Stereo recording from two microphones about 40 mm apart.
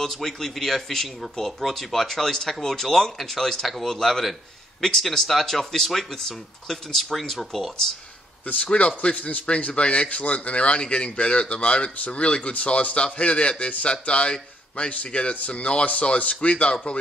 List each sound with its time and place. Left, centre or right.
0.0 s speech: centre
8.7 s a man's voice: left